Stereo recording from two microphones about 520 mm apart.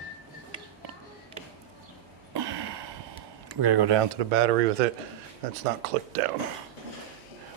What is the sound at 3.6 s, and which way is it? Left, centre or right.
Speech, right.